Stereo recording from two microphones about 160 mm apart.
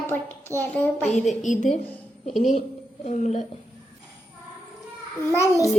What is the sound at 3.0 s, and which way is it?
Speech, 45° left (ahead or behind).